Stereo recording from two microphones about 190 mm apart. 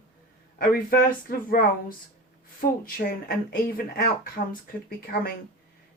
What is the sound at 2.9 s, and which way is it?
Speech, 50° left (ahead or behind).